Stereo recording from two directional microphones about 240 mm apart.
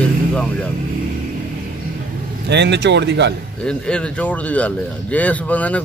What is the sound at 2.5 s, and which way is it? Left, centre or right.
Speech, right.